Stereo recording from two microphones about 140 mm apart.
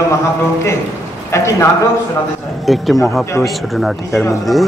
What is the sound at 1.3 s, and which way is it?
Speech, 20° left (ahead or behind).